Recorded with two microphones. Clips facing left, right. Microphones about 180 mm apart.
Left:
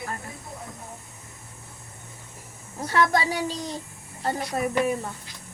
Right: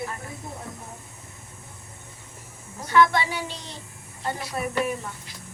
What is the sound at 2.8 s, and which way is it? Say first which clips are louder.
Speech: right 2 dB; 40° left (ahead or behind).